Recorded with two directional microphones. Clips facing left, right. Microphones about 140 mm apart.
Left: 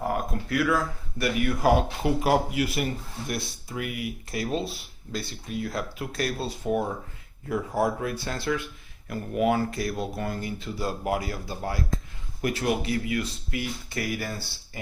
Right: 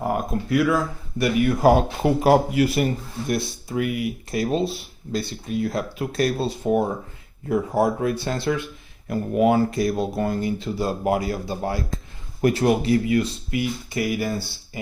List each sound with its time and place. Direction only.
0.1 s speech: 20° right (ahead or behind); by 3.3 s 35° right (ahead or behind)
3.3 s speech: 25° right (ahead or behind)
13.6 s speech: 15° right (ahead or behind)